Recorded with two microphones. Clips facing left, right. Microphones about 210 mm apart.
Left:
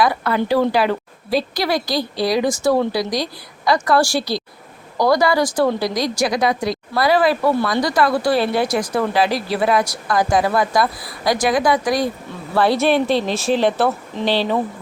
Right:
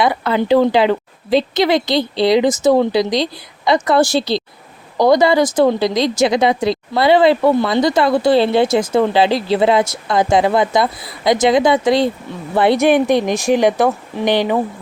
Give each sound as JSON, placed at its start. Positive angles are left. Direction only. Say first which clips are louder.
{"t": 0.0, "sound": "a woman's voice", "louder": "right 2 dB", "side_deg": -25}